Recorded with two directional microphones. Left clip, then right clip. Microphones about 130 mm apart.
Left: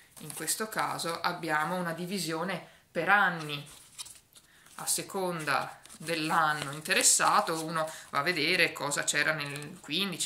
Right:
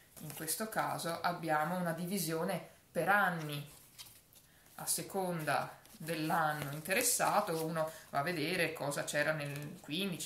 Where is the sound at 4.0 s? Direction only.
30° right (ahead or behind).